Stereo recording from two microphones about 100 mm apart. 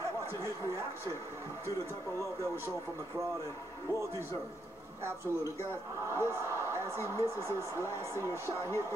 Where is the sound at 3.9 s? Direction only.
25° left (ahead or behind).